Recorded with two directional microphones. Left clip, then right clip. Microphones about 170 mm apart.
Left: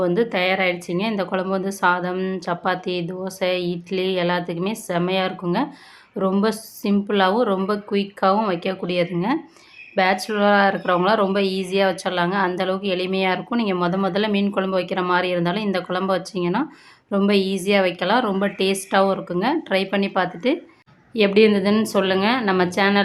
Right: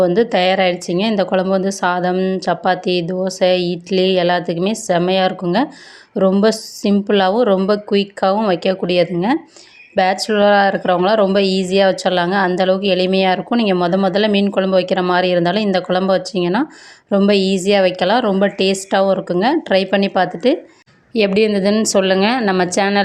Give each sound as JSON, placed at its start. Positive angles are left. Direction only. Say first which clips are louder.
{"t": 0.0, "sound": "a woman's voice", "louder": "right 6 dB", "side_deg": -30}